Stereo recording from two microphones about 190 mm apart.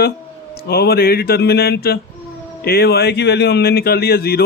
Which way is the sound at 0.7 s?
55° left (ahead or behind).